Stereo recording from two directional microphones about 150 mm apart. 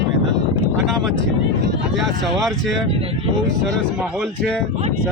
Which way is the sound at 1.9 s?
Centre (ahead or behind).